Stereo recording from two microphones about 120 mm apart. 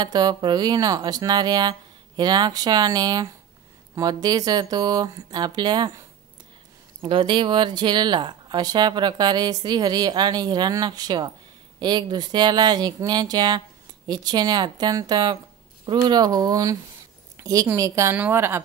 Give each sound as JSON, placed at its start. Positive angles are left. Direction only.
{"t": 0.0, "sound": "speech", "side_deg": -35}
{"t": 7.0, "sound": "speech", "side_deg": -45}
{"t": 17.4, "sound": "a sound", "side_deg": -30}
{"t": 17.7, "sound": "a woman's voice", "side_deg": -25}